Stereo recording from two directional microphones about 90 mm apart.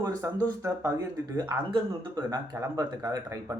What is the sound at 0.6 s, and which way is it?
Speech, 35° right (ahead or behind).